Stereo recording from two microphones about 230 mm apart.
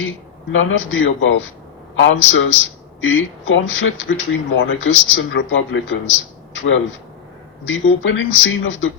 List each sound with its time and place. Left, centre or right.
0.5 s a man's voice: left
6.5 s a sound: left
7.6 s speech: left